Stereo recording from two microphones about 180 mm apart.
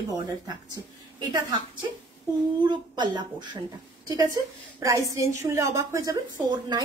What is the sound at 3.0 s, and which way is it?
Speech, 25° right (ahead or behind).